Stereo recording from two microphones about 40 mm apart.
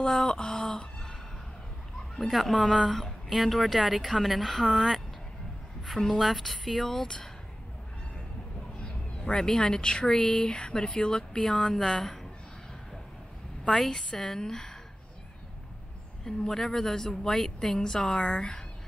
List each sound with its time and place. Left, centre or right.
0.1 s a sound: centre
2.3 s a woman's voice: centre
6.2 s a woman's voice: centre
6.8 s a woman's voice: centre
8.7 s a woman's voice: left; by 12.3 s centre
13.7 s a woman's voice: centre
16.3 s a woman's voice: centre